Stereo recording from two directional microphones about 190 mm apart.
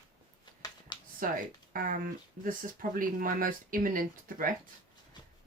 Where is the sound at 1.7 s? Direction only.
50° right (ahead or behind).